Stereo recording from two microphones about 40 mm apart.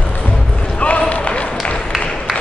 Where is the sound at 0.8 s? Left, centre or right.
Left.